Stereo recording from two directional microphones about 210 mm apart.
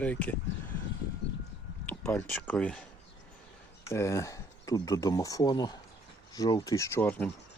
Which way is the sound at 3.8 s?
15° left (ahead or behind).